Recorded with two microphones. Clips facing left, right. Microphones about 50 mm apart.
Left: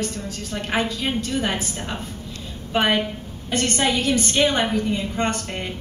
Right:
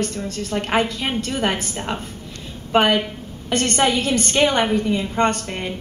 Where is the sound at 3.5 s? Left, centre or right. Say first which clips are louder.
Right 3 dB; right.